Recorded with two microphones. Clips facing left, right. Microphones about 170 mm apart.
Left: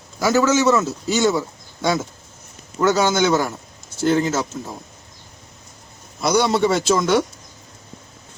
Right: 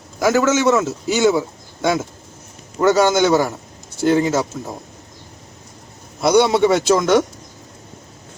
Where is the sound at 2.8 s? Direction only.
Centre (ahead or behind).